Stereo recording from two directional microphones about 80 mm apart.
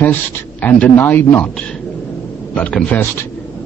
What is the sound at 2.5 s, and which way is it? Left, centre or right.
Speech, centre.